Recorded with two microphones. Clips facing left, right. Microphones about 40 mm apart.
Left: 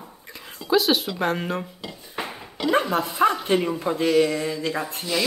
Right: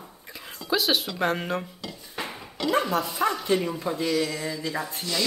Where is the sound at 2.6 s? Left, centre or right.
Centre.